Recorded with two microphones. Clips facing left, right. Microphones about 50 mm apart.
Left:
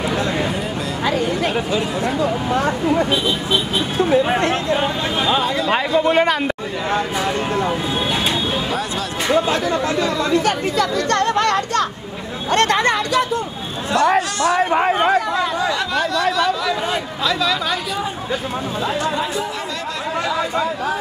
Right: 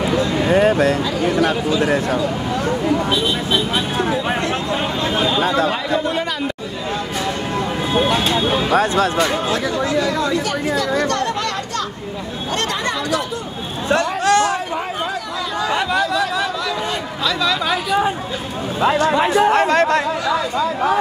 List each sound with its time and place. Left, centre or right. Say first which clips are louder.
0.5 s a sound: right 10 dB; right
2.5 s speech: left 1 dB; left
5.4 s speech: right 3 dB; right
6.0 s speech: left 6 dB; left
8.5 s speech: right 5 dB; right
9.3 s speech: left 3 dB; left
11.1 s chatter: left 4 dB; left
14.4 s chatter: left 4 dB; left
17.2 s chatter: right 1 dB; centre
18.8 s speech: right 8 dB; right
19.0 s chatter: right 7 dB; right